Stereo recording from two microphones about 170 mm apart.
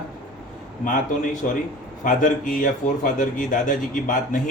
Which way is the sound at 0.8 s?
50° left (ahead or behind).